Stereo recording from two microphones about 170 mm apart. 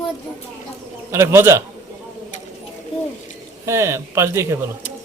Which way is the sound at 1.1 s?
15° right (ahead or behind).